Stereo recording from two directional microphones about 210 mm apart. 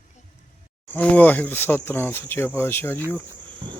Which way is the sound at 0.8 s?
10° left (ahead or behind).